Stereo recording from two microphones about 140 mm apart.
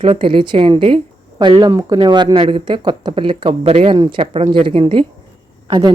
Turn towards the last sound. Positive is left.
turn(degrees=-35)  # may be behind; listen again after turning